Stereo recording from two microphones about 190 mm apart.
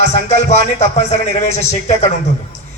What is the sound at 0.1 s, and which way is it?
A man's voice, 35° left (ahead or behind).